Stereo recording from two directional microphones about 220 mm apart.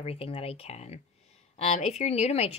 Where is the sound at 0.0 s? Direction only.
25° left (ahead or behind).